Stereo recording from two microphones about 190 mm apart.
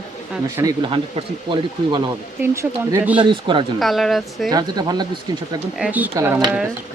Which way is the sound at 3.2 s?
25° right (ahead or behind).